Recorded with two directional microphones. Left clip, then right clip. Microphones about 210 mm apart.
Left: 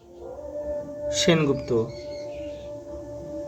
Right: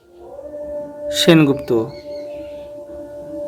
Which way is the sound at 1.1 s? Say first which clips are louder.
Right 9 dB; 50° right (ahead or behind).